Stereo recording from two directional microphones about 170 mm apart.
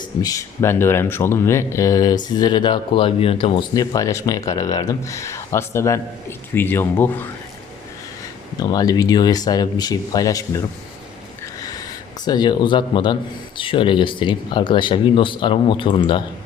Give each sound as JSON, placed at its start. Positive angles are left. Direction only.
{"t": 0.2, "sound": "speech", "side_deg": 20}
{"t": 8.5, "sound": "speech", "side_deg": 25}
{"t": 12.2, "sound": "speech", "side_deg": 25}